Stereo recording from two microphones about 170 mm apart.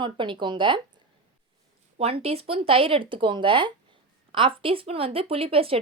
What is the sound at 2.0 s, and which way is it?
Speech, 35° right (ahead or behind).